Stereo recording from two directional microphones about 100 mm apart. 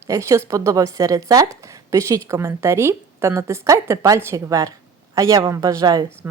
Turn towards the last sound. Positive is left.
turn(degrees=-25)  # may be behind; listen again after turning